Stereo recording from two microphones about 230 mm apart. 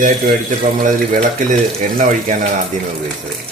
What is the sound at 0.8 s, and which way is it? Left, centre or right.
Speech, right.